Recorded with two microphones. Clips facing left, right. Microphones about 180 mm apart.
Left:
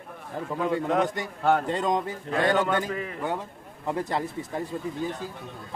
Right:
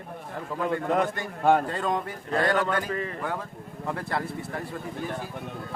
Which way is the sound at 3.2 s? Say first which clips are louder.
Left 2 dB; 20° left (ahead or behind).